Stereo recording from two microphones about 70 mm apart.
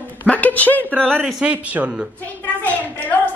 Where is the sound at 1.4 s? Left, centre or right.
Centre.